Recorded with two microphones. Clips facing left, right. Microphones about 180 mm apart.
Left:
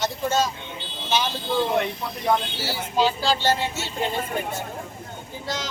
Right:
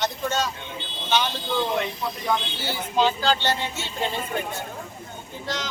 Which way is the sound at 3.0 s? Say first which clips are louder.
Even; 10° left (ahead or behind).